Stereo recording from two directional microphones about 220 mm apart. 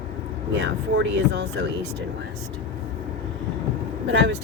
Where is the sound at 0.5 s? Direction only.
55° right (ahead or behind).